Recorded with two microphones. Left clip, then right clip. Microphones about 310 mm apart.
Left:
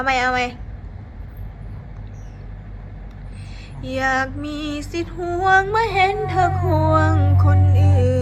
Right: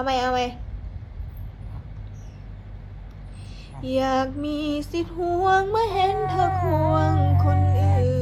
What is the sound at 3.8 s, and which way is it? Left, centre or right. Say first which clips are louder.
Female singing: left 2 dB; centre.